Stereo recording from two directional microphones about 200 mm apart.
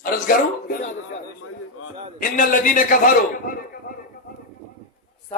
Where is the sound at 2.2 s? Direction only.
45° left (ahead or behind).